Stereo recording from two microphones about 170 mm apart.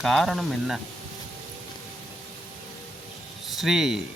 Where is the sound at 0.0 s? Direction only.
Centre (ahead or behind).